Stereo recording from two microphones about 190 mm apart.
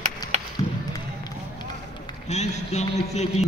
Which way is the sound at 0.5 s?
20° left (ahead or behind).